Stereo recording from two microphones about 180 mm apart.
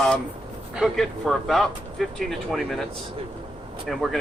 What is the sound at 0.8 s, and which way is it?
Speech, centre (ahead or behind).